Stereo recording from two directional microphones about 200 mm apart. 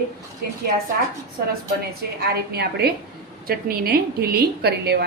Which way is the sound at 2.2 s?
55° right (ahead or behind).